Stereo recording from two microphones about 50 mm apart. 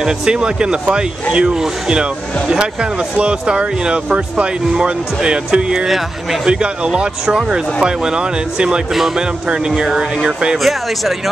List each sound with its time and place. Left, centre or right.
0.0 s speech: centre
5.9 s speech: centre
6.4 s speech: centre
8.9 s speech: centre
9.2 s speech: centre
10.6 s speech: centre